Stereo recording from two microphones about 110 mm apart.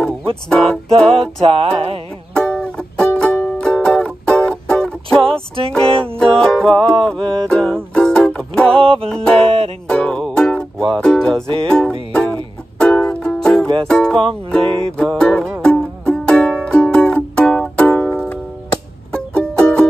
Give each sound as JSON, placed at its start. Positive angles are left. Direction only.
{"t": 0.5, "sound": "music", "side_deg": 5}
{"t": 1.4, "sound": "music", "side_deg": -60}
{"t": 2.3, "sound": "music", "side_deg": 10}
{"t": 8.8, "sound": "music", "side_deg": -60}
{"t": 9.1, "sound": "music", "side_deg": 5}
{"t": 19.1, "sound": "music", "side_deg": 5}